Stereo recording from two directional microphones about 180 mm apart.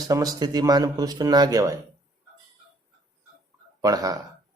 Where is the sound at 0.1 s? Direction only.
20° right (ahead or behind).